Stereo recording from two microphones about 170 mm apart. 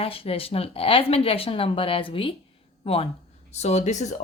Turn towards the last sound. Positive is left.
turn(degrees=40)  # may be behind; listen again after turning